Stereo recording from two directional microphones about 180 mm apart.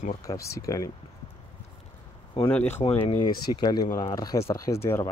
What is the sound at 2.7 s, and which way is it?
Speech, 35° left (ahead or behind).